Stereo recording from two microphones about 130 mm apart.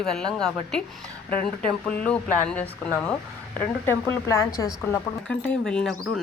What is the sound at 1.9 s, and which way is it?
Speech, 10° left (ahead or behind).